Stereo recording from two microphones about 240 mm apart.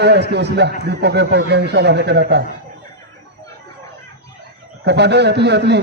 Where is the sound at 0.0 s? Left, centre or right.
Right.